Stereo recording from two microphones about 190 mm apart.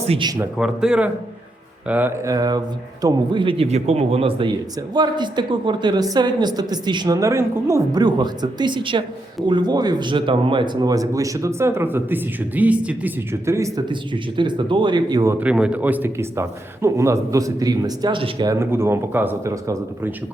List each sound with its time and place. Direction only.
0.0 s speech: 30° right (ahead or behind)
0.3 s a man's voice: 5° right (ahead or behind)